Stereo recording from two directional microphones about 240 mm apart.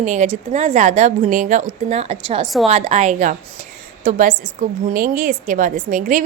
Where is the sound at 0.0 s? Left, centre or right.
Right.